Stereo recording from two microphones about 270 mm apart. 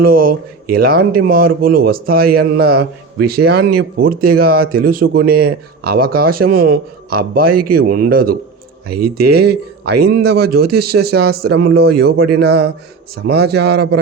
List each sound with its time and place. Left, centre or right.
0.0 s speech: right